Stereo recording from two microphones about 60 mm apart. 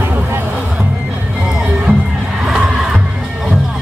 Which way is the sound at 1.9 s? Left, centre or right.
Right.